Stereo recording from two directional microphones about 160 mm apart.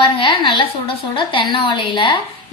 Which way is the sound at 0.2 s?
25° left (ahead or behind).